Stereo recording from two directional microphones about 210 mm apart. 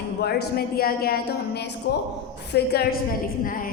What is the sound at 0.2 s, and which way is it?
A woman's voice, 50° left (ahead or behind).